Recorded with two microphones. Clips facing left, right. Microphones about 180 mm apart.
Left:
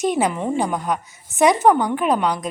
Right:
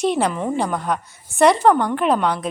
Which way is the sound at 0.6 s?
Centre (ahead or behind).